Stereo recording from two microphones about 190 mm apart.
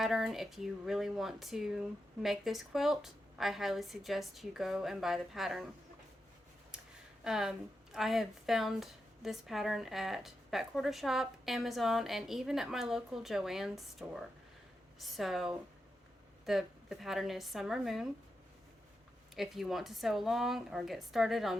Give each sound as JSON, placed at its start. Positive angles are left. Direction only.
{"t": 0.0, "sound": "speech", "side_deg": 0}
{"t": 7.3, "sound": "speech", "side_deg": -5}
{"t": 19.4, "sound": "speech", "side_deg": 0}